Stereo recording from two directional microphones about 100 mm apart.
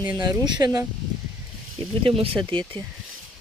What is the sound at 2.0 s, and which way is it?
Speech, 65° right (ahead or behind).